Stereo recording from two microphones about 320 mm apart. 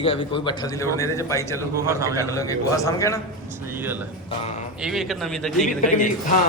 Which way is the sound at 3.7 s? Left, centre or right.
Centre.